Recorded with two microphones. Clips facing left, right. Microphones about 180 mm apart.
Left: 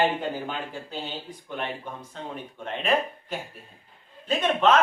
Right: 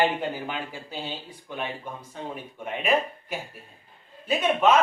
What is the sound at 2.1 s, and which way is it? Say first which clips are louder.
Speech: right 2 dB; 10° right (ahead or behind).